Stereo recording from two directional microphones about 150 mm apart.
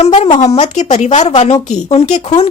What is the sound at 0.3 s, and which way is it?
A woman's voice, 45° left (ahead or behind).